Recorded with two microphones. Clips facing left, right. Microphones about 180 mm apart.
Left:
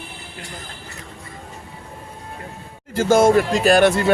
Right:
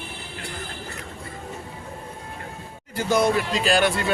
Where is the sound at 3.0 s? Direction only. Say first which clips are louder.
Left 6 dB; 90° left.